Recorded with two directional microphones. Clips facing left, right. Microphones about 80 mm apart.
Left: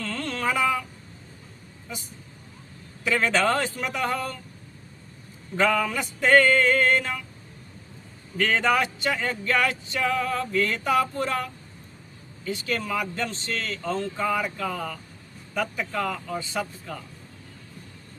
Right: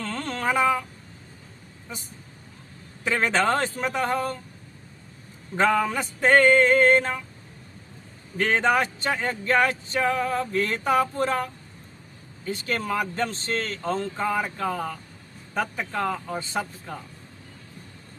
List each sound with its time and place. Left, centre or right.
0.0 s a sound: right
3.0 s speech: right
5.5 s speech: right
8.4 s speech: right
12.5 s speech: right